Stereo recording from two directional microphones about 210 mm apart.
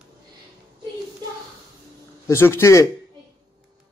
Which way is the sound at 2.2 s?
10° left (ahead or behind).